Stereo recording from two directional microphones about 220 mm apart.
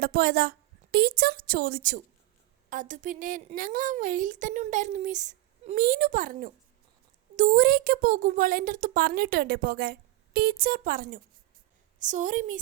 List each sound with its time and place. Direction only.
0.0 s a woman's voice: 45° right (ahead or behind)